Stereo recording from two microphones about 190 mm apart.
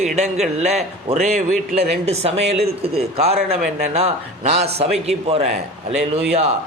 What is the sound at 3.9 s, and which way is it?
A man's voice, 35° right (ahead or behind).